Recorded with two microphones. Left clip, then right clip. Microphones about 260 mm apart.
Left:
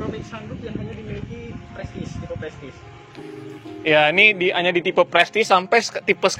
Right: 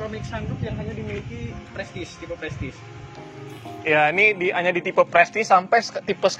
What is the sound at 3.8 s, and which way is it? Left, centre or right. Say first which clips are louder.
Speech: left 3 dB; left.